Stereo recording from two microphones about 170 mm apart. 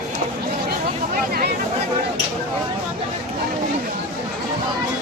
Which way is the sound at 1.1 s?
60° right (ahead or behind).